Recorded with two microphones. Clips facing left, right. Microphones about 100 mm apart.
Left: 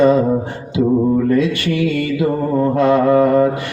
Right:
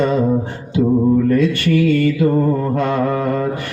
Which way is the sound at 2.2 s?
20° left (ahead or behind).